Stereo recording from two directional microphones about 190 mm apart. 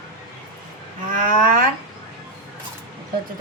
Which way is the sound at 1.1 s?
45° right (ahead or behind).